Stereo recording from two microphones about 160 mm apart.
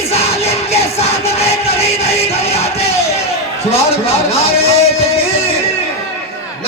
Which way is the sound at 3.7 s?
40° left (ahead or behind).